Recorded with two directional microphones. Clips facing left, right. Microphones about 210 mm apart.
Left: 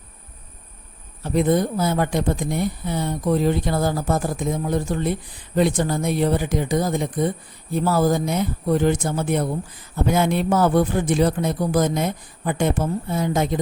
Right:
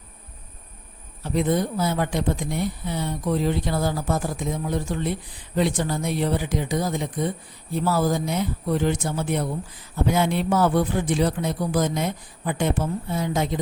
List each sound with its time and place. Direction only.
1.2 s speech: 50° left (ahead or behind)